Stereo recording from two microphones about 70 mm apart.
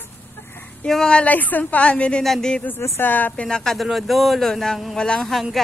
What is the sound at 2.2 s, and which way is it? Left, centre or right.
Speech, centre.